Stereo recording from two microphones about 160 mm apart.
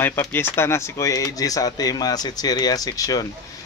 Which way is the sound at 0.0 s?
15° left (ahead or behind).